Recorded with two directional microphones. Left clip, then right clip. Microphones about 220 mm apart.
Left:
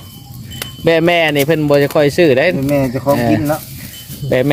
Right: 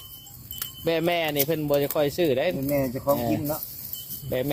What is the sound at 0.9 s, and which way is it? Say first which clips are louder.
Speech: left 13 dB; 10° left (ahead or behind).